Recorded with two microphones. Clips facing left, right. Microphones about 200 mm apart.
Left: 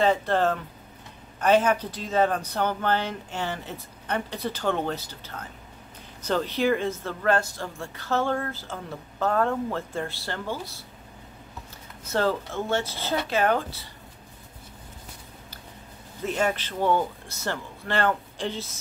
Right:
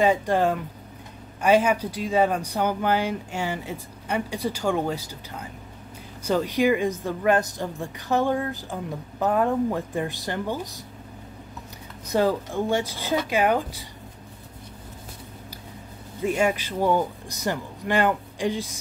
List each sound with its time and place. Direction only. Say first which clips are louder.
0.0 s speech: right 2 dB; 10° right (ahead or behind)
12.1 s speech: right 3 dB; 15° right (ahead or behind)
16.3 s speech: right 3 dB; 10° right (ahead or behind)